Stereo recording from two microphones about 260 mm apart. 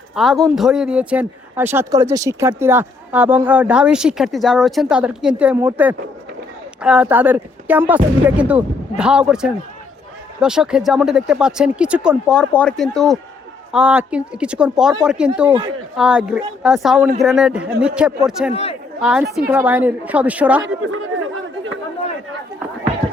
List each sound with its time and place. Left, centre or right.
0.2 s speech: centre
18.5 s speech: left
19.2 s a woman's voice: right
19.5 s speech: centre